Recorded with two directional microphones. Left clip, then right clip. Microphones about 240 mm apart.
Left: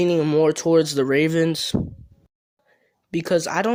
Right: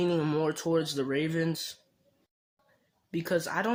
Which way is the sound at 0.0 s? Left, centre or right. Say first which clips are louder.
Left 10 dB; left.